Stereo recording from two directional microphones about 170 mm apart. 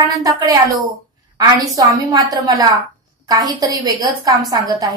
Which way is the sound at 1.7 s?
20° right (ahead or behind).